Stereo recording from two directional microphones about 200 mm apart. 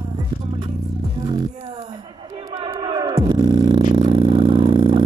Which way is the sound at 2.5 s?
25° right (ahead or behind).